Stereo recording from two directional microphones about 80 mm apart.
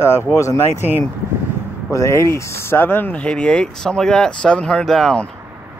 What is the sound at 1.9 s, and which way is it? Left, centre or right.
Speech, left.